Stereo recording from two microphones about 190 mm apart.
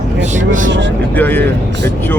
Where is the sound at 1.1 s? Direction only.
10° left (ahead or behind).